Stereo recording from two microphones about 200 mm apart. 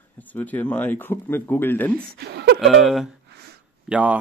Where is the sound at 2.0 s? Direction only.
55° right (ahead or behind).